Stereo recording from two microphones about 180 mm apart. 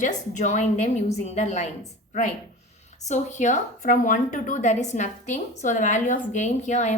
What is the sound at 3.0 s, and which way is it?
A woman's voice, 40° left (ahead or behind).